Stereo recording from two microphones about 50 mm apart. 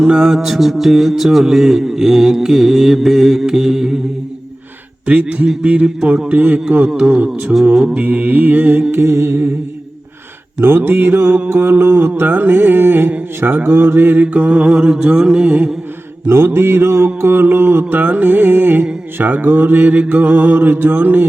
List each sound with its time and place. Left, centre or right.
0.0 s mantra: centre
5.0 s speech: right
7.9 s mantra: right
8.9 s mantra: right
10.6 s music: right
11.1 s mantra: right
12.4 s music: right
13.4 s mantra: right
13.7 s mantra: right
14.2 s speech: right
16.2 s mantra: right
17.5 s music: right
17.8 s mantra: right